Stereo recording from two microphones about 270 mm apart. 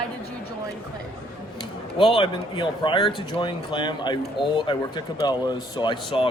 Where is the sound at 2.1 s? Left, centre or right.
Centre.